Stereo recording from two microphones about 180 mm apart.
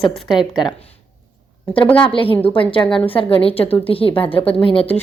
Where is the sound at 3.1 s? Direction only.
30° left (ahead or behind).